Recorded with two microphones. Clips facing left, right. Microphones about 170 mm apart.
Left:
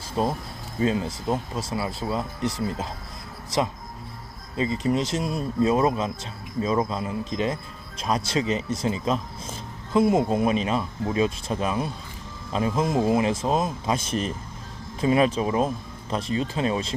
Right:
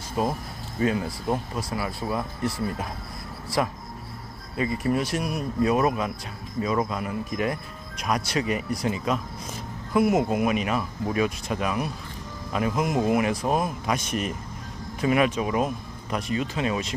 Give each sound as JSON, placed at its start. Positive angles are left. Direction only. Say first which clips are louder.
{"t": 0.2, "sound": "speech", "louder": "left 1 dB", "side_deg": 30}